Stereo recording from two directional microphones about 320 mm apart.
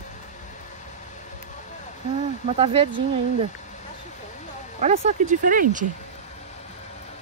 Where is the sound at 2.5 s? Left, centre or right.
Centre.